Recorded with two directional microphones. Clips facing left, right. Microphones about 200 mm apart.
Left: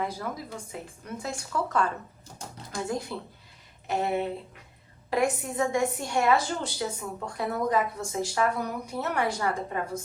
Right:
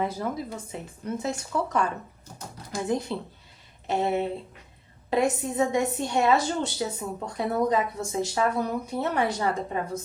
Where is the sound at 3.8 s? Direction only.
25° right (ahead or behind).